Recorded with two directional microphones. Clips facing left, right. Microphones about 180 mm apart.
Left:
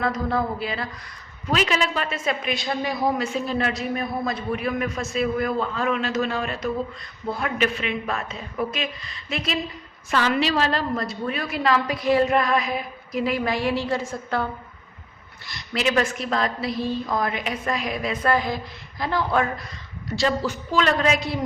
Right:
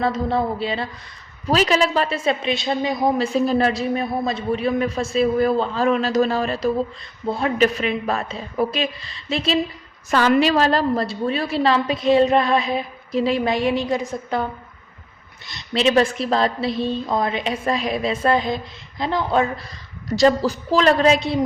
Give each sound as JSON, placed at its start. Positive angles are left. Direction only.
{"t": 0.0, "sound": "a woman's voice", "side_deg": -25}
{"t": 3.3, "sound": "a man's voice", "side_deg": -35}
{"t": 10.1, "sound": "a woman's voice", "side_deg": -45}
{"t": 15.4, "sound": "a woman's voice", "side_deg": -25}
{"t": 20.1, "sound": "a man's voice", "side_deg": -40}